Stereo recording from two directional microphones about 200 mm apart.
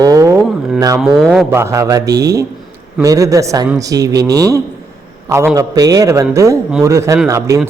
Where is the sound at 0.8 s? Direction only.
15° right (ahead or behind).